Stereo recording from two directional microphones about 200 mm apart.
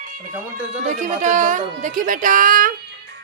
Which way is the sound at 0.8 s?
40° right (ahead or behind).